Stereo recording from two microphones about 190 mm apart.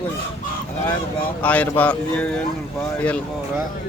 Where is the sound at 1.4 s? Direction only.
10° left (ahead or behind).